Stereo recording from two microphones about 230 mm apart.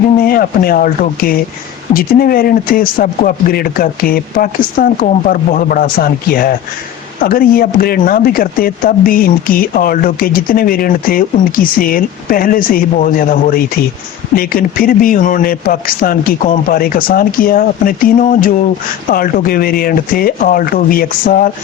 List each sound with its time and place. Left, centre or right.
0.2 s speech: left